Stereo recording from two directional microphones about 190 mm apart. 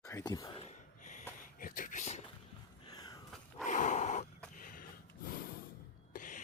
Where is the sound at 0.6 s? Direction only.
40° left (ahead or behind).